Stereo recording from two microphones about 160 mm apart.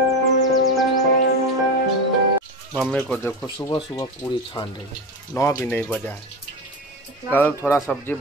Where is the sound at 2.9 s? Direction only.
5° left (ahead or behind).